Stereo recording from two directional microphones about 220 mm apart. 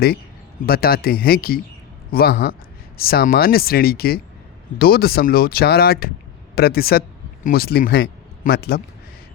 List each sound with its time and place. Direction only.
0.6 s a man's voice: 45° left (ahead or behind)